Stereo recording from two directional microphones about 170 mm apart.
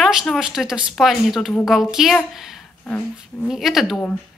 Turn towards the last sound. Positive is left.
turn(degrees=0)  # may be behind; listen again after turning